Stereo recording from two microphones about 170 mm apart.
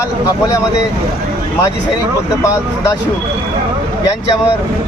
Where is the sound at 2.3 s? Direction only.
20° left (ahead or behind).